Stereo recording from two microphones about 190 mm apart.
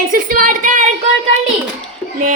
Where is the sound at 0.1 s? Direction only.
45° right (ahead or behind).